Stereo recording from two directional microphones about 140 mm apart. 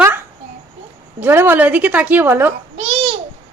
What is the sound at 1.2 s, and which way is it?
A woman's voice, 15° right (ahead or behind).